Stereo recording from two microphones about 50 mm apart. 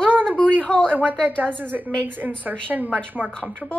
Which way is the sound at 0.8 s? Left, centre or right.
Right.